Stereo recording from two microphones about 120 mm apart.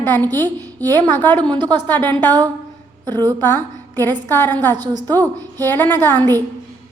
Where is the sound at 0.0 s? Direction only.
15° left (ahead or behind).